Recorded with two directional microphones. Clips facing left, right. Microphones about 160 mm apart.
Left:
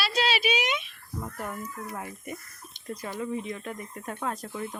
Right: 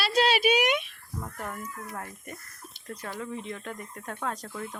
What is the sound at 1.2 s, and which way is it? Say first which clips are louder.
Speech: left 2 dB; 5° left (ahead or behind).